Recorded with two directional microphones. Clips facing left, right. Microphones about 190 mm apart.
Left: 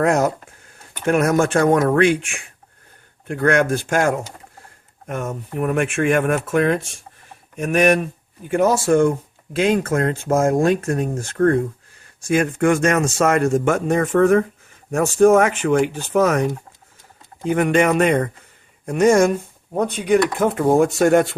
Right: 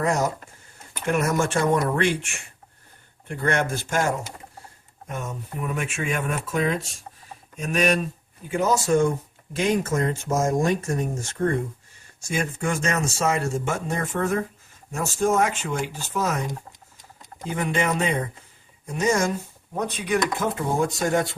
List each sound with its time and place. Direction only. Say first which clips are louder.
0.0 s speech: left 6 dB; 60° left (ahead or behind)
17.5 s speech: left 8 dB; 60° left (ahead or behind)